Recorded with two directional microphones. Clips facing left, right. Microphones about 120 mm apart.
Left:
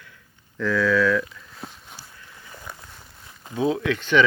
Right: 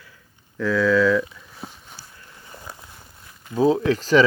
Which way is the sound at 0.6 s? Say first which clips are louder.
Right 2 dB; 5° right (ahead or behind).